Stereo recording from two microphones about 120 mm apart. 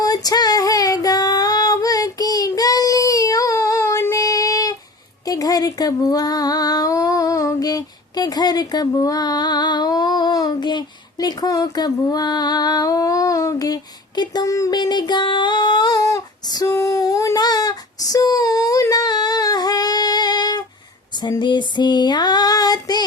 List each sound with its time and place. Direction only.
0.0 s female singing: 30° left (ahead or behind)
5.2 s speech: 30° left (ahead or behind)
14.2 s a sound: 30° left (ahead or behind)
21.2 s child singing: 40° left (ahead or behind)